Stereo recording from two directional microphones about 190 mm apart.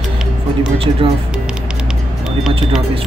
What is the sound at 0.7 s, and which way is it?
Speech, 30° right (ahead or behind).